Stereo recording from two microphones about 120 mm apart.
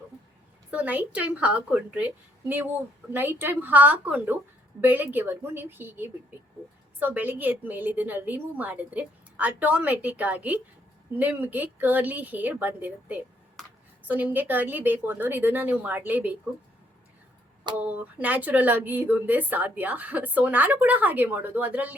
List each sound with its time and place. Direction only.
0.7 s speech: 15° right (ahead or behind)
17.7 s speech: 15° right (ahead or behind)